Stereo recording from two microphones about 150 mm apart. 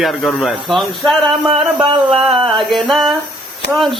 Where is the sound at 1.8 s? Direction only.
35° right (ahead or behind).